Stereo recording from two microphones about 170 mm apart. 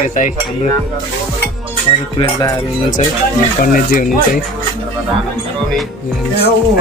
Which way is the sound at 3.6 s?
55° left (ahead or behind).